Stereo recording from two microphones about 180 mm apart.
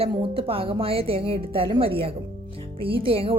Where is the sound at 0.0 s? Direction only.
30° right (ahead or behind).